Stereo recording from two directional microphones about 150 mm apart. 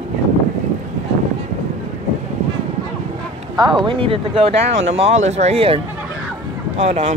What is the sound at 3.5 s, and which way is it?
Speech, 30° right (ahead or behind).